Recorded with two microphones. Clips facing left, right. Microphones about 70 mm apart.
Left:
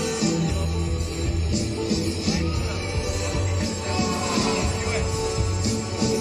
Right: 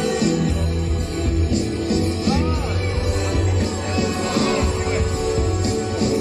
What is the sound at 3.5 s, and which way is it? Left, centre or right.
Music, right.